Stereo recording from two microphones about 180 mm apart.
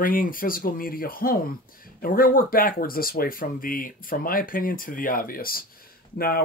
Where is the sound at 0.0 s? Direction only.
50° left (ahead or behind).